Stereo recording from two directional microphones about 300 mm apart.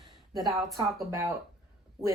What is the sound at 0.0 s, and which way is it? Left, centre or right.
Speech, centre.